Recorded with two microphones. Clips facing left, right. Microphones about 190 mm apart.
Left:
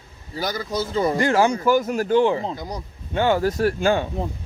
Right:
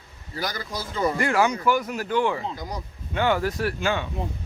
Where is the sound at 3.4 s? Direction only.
40° left (ahead or behind).